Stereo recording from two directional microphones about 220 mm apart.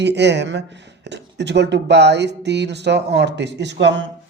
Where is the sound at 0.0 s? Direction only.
50° right (ahead or behind).